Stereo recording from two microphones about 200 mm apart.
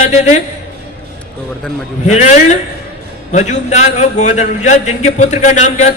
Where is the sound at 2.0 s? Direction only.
35° left (ahead or behind).